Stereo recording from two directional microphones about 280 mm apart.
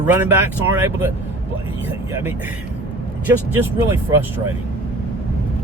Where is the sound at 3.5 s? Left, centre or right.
Centre.